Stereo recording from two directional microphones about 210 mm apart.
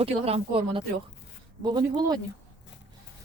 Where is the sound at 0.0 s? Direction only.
30° right (ahead or behind).